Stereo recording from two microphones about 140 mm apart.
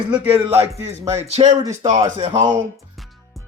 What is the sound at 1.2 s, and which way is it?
Speech, 50° right (ahead or behind).